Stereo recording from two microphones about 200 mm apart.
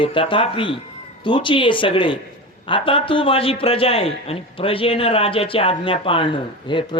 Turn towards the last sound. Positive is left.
turn(degrees=25)  # may be behind; listen again after turning